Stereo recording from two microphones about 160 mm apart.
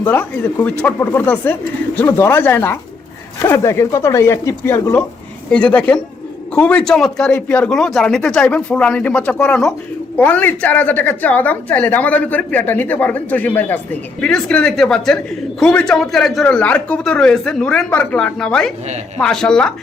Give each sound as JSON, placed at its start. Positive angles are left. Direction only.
{"t": 0.0, "sound": "a woman's voice", "side_deg": 10}